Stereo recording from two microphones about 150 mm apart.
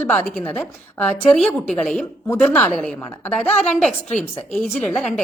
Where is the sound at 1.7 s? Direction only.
Centre (ahead or behind).